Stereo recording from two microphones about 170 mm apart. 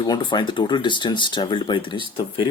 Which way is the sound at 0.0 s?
25° left (ahead or behind).